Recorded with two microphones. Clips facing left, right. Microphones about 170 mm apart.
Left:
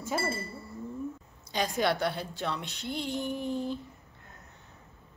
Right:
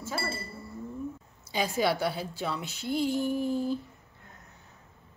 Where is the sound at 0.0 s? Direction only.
20° left (ahead or behind).